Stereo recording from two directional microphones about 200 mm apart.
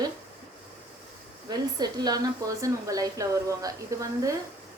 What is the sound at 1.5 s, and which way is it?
A woman's voice, 20° right (ahead or behind).